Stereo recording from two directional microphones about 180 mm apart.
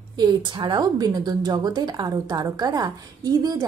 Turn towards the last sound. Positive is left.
turn(degrees=-20)  # may be behind; listen again after turning